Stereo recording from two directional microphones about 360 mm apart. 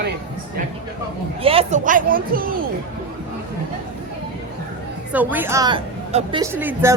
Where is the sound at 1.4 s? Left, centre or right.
Centre.